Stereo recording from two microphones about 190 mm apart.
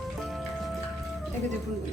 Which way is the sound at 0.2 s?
Centre (ahead or behind).